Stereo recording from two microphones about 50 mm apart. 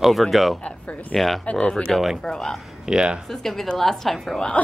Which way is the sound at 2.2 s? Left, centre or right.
Centre.